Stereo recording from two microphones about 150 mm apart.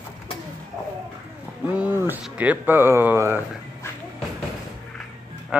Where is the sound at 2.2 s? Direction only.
10° right (ahead or behind).